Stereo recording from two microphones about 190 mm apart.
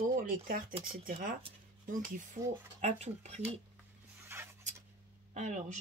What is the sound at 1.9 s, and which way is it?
Speech, 45° right (ahead or behind).